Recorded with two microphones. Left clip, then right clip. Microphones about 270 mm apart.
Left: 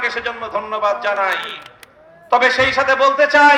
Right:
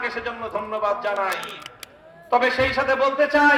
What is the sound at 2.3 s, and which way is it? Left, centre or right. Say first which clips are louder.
Speech: left 6 dB; left.